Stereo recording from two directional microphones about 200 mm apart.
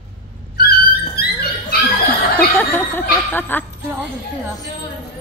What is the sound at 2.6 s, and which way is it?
Speech, 10° left (ahead or behind).